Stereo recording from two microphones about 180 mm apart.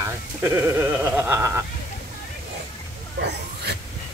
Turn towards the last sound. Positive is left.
turn(degrees=-65)  # may be behind; listen again after turning